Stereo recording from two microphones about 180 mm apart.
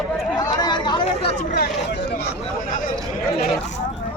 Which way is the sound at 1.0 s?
35° left (ahead or behind).